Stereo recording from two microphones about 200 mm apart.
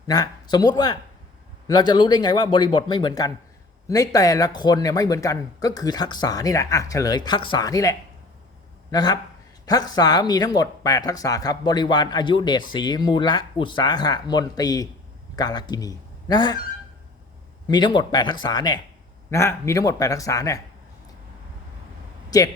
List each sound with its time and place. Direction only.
0.1 s a man's voice: 20° left (ahead or behind)
17.7 s speech: 20° left (ahead or behind)